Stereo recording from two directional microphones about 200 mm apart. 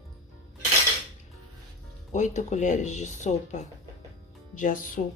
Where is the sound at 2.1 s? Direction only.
35° left (ahead or behind).